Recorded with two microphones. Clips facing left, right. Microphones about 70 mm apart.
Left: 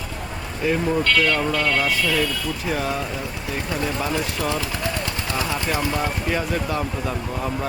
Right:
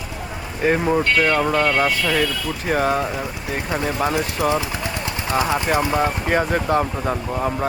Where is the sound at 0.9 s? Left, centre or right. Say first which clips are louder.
Right 2 dB; right.